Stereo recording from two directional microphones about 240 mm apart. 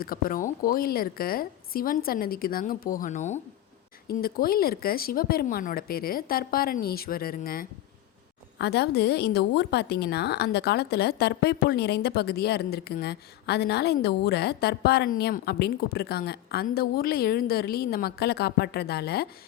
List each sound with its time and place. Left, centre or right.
0.0 s a woman's voice: left